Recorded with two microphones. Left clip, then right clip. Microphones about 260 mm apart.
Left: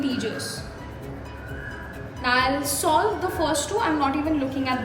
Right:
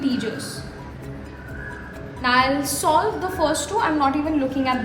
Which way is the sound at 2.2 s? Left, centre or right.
Right.